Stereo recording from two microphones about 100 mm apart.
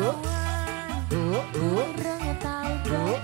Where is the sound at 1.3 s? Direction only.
25° right (ahead or behind).